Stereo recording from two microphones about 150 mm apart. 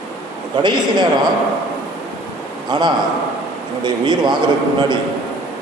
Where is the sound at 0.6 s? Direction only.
30° right (ahead or behind).